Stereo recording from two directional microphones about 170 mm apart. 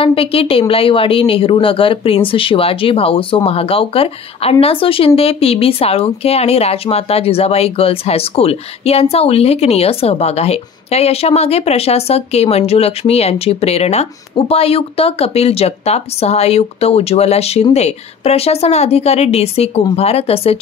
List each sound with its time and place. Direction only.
0.0 s a woman's voice: 35° left (ahead or behind)